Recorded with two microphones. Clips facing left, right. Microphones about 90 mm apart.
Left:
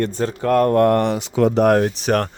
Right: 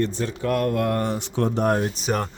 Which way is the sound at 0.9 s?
90° left.